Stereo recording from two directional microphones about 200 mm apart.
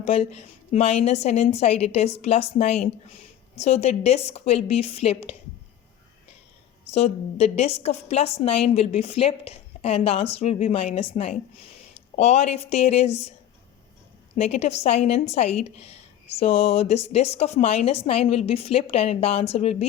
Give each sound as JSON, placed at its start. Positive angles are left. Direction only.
{"t": 0.0, "sound": "a woman's voice", "side_deg": 30}
{"t": 6.9, "sound": "a woman's voice", "side_deg": 30}
{"t": 14.3, "sound": "a woman's voice", "side_deg": 30}